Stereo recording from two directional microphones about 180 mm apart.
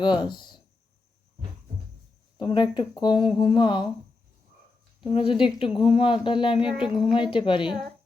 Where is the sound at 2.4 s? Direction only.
25° left (ahead or behind).